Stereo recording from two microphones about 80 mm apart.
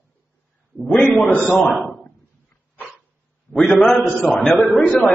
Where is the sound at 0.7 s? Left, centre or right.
Centre.